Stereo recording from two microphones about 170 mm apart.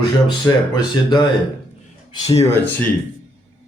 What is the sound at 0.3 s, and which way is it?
Speech, 25° left (ahead or behind).